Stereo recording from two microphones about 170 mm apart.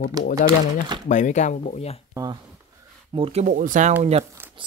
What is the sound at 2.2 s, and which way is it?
Speech, 20° right (ahead or behind).